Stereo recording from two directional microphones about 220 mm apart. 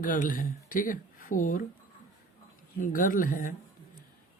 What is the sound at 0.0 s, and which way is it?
Speech, 40° left (ahead or behind).